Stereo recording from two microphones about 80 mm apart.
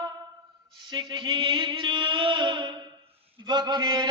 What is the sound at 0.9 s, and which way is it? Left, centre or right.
Mantra, right.